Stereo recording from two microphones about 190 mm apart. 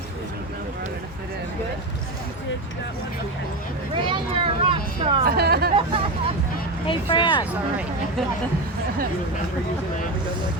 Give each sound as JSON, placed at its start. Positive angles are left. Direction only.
{"t": 3.9, "sound": "speech", "side_deg": -25}
{"t": 5.2, "sound": "speech", "side_deg": -55}
{"t": 5.7, "sound": "hubbub", "side_deg": -30}
{"t": 6.8, "sound": "speech", "side_deg": 25}